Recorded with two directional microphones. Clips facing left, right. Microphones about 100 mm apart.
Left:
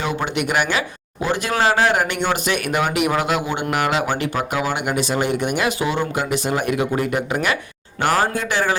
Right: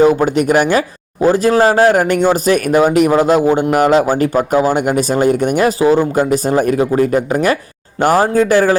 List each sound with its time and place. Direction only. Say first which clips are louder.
0.3 s a man's voice: right 8 dB; 45° right (ahead or behind)